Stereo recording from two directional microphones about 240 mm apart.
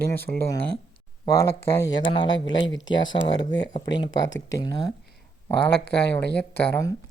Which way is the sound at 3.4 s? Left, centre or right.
Left.